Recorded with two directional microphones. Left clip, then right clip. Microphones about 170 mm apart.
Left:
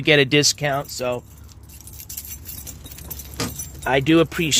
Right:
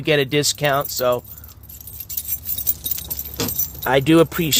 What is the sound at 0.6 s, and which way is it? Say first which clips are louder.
Speech: right 4 dB; 15° right (ahead or behind).